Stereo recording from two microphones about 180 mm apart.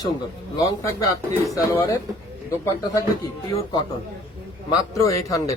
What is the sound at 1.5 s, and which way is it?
Speech, 15° left (ahead or behind).